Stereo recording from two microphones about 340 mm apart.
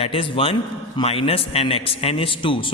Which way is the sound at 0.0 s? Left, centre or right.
Centre.